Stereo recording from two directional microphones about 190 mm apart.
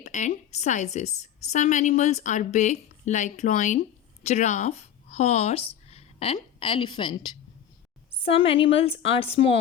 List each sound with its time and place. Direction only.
0.0 s a woman's voice: 40° left (ahead or behind)